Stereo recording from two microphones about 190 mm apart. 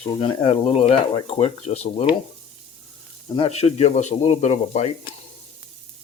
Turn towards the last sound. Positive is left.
turn(degrees=35)  # may be behind; listen again after turning